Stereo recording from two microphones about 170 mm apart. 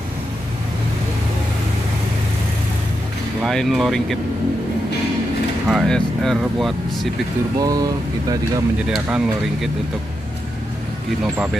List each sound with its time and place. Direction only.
3.4 s speech: centre (ahead or behind)
5.7 s speech: centre (ahead or behind)
7.5 s speech: 20° right (ahead or behind)
8.8 s speech: centre (ahead or behind)